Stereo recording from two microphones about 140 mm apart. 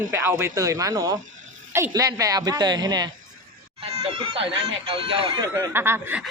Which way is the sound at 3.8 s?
40° right (ahead or behind).